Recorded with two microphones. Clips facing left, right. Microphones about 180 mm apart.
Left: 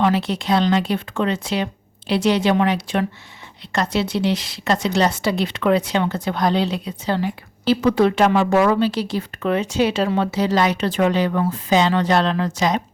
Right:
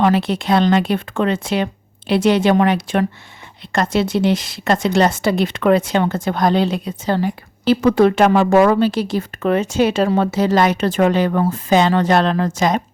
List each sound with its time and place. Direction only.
0.0 s a woman's voice: 55° right (ahead or behind)